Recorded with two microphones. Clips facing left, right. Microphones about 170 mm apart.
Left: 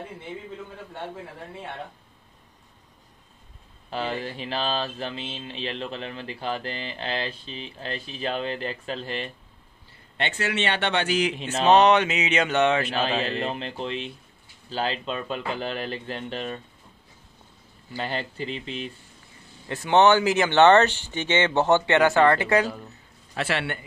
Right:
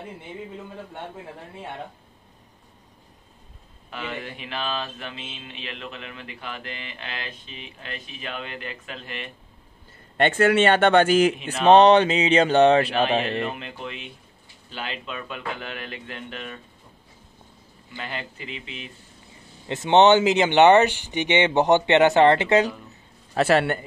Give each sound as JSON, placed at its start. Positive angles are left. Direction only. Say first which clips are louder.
{"t": 3.9, "sound": "mantra", "louder": "left 4 dB", "side_deg": 30}
{"t": 10.1, "sound": "a man's voice", "louder": "right 9 dB", "side_deg": -50}
{"t": 11.6, "sound": "a sound", "louder": "right 4 dB", "side_deg": -30}
{"t": 13.4, "sound": "mantra", "louder": "left 1 dB", "side_deg": 30}
{"t": 17.9, "sound": "mantra", "louder": "left 4 dB", "side_deg": 30}
{"t": 19.7, "sound": "speech", "louder": "right 2 dB", "side_deg": -20}
{"t": 23.3, "sound": "a man's voice", "louder": "right 8 dB", "side_deg": -40}